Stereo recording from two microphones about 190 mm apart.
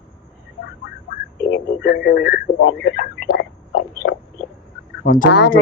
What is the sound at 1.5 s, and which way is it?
Radio, 60° left (ahead or behind).